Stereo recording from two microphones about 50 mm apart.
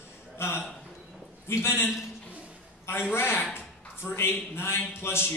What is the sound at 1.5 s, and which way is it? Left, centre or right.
Speech, left.